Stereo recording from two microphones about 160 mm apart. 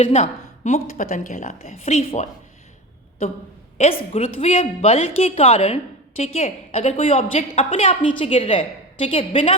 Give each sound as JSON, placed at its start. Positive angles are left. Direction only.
{"t": 0.0, "sound": "a woman's voice", "side_deg": 45}
{"t": 3.8, "sound": "a woman's voice", "side_deg": 40}